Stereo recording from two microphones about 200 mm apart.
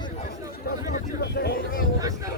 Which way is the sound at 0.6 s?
50° left (ahead or behind).